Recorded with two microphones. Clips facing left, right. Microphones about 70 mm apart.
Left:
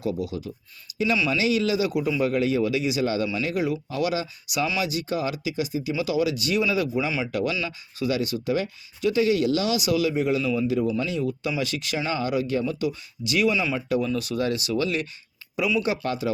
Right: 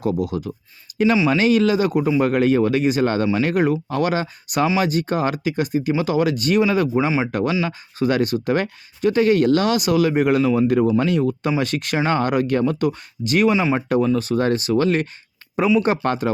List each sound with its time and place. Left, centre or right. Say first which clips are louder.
0.0 s speech: right 6 dB; right
14.1 s speech: right 7 dB; right